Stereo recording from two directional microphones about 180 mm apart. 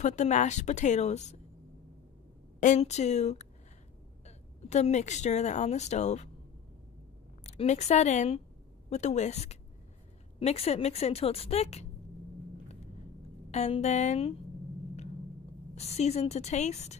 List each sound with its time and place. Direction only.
0.0 s a woman's voice: 40° left (ahead or behind)
2.6 s a woman's voice: 40° left (ahead or behind)
7.4 s a woman's voice: 40° left (ahead or behind)
13.5 s a woman's voice: 40° left (ahead or behind)
15.7 s a woman's voice: 35° left (ahead or behind)